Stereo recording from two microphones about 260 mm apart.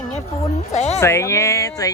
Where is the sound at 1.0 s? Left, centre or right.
Centre.